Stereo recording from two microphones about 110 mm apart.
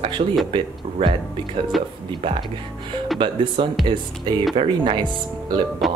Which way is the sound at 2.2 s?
50° right (ahead or behind).